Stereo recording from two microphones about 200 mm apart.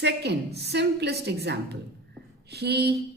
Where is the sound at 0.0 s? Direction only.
55° right (ahead or behind).